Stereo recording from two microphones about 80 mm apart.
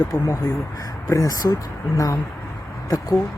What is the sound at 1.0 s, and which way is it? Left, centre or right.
Speech, left.